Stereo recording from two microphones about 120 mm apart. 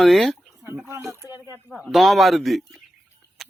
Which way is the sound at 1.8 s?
Centre (ahead or behind).